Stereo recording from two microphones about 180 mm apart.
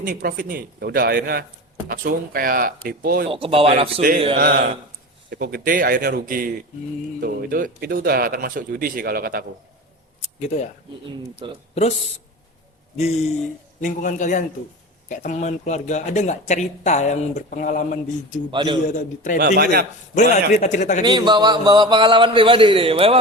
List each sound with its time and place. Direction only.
0.0 s speech: 50° right (ahead or behind)
3.2 s speech: 30° right (ahead or behind)
4.4 s speech: 60° right (ahead or behind)
10.4 s speech: 40° left (ahead or behind)
11.7 s speech: 35° left (ahead or behind)
13.0 s a man's voice: 35° left (ahead or behind)
18.5 s a man's voice: 25° right (ahead or behind)
18.9 s a man's voice: 45° left (ahead or behind)
19.4 s speech: 60° right (ahead or behind)
20.5 s speech: 40° left (ahead or behind)
21.0 s a man's voice: 25° right (ahead or behind)